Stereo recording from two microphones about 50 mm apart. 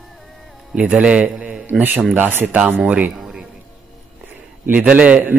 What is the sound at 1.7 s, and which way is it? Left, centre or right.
Speech, right.